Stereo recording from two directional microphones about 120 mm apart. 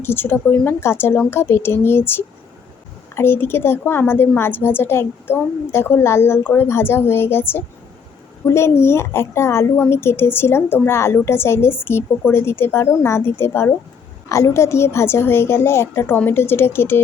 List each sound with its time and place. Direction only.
0.0 s a woman's voice: 20° left (ahead or behind)